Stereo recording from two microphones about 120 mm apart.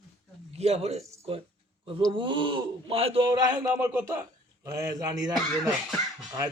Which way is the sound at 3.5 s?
20° right (ahead or behind).